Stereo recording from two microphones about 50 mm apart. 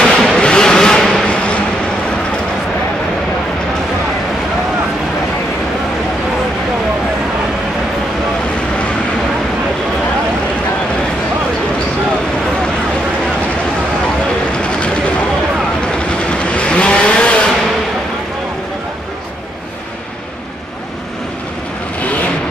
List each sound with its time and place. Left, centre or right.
0.0 s vehicle: centre
1.2 s a sound: left
16.3 s vehicle: left